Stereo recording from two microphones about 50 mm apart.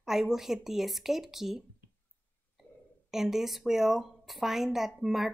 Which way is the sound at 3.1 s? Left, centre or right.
Centre.